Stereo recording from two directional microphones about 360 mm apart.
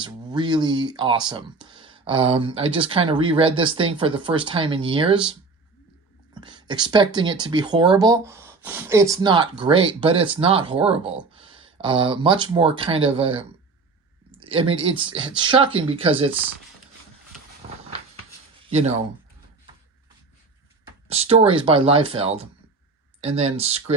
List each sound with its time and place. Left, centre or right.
0.0 s speech: centre
6.3 s speech: centre
18.7 s speech: centre
21.1 s speech: centre